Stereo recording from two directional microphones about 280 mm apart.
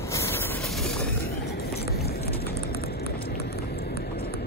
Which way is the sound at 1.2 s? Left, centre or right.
Left.